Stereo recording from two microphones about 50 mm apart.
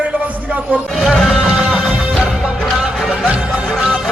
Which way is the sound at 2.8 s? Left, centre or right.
Centre.